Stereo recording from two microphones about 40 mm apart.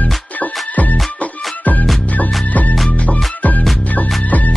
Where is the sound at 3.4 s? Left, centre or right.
Left.